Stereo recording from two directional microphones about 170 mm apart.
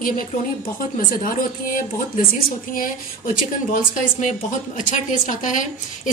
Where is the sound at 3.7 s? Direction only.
50° left (ahead or behind).